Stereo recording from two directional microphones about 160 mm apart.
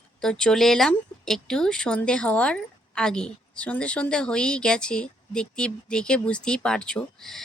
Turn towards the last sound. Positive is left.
turn(degrees=0)  # may be behind; listen again after turning